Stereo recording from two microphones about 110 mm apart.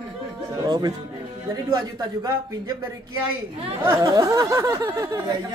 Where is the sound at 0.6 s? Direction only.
40° right (ahead or behind).